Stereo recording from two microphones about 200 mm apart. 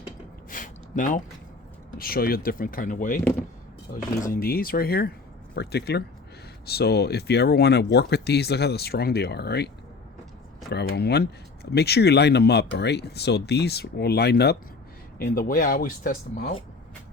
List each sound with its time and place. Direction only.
0.5 s a sound: 40° left (ahead or behind)
2.0 s speech: 50° left (ahead or behind)
10.7 s speech: 55° left (ahead or behind)